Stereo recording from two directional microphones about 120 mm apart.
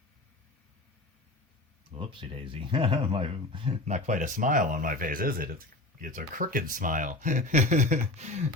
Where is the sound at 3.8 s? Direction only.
85° right.